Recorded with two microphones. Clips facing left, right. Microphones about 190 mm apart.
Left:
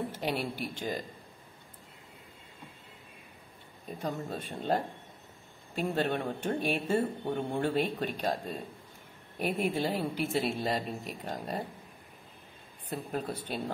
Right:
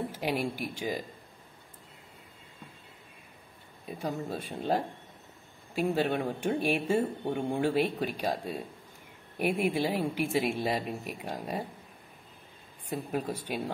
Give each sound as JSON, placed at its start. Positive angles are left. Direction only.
{"t": 0.1, "sound": "speech", "side_deg": -10}
{"t": 3.8, "sound": "speech", "side_deg": -5}
{"t": 12.9, "sound": "speech", "side_deg": -10}